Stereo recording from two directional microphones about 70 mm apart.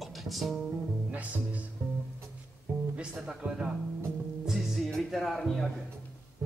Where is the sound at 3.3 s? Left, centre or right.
Centre.